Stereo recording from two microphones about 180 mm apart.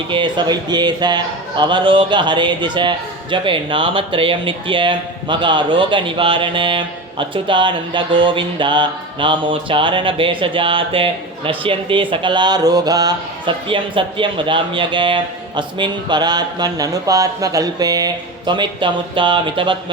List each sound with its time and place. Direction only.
0.1 s speech: 25° right (ahead or behind)